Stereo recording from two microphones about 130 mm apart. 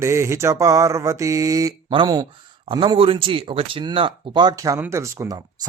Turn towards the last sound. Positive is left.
turn(degrees=-30)  # may be behind; listen again after turning